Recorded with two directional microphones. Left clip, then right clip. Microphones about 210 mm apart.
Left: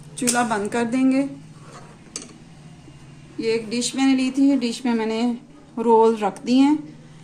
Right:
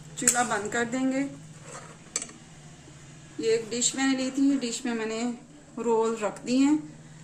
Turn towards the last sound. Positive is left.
turn(degrees=40)  # may be behind; listen again after turning